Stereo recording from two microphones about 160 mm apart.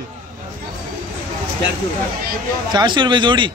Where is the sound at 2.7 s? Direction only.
30° right (ahead or behind).